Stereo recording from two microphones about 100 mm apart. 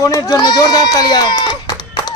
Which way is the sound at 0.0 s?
35° left (ahead or behind).